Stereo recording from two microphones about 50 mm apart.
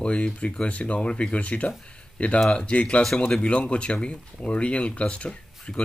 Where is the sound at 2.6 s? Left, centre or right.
Left.